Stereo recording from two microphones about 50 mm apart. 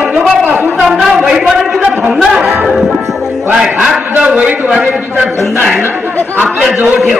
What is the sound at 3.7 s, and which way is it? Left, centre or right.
Speech, centre.